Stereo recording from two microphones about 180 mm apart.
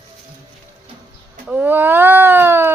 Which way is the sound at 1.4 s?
10° right (ahead or behind).